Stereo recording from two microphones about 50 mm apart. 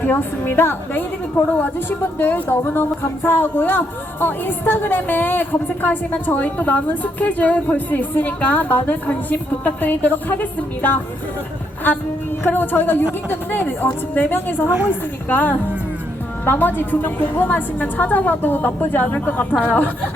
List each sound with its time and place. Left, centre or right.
0.0 s a woman's voice: left
2.0 s a woman's voice: left